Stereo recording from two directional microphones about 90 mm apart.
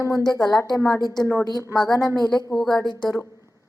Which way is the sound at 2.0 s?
50° left (ahead or behind).